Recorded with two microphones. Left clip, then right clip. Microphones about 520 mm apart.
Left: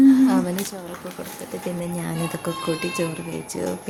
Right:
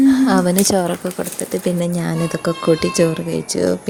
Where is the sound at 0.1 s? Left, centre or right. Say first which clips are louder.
Right 3 dB; left.